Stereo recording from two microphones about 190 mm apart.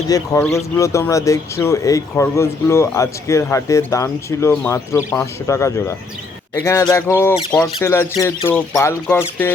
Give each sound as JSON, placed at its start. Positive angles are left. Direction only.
{"t": 0.1, "sound": "speech", "side_deg": 15}